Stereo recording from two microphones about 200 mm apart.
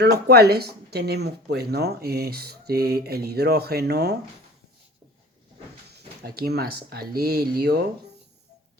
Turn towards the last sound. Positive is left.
turn(degrees=-50)  # may be behind; listen again after turning